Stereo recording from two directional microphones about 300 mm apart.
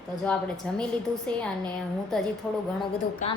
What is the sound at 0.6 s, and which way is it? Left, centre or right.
Speech, centre.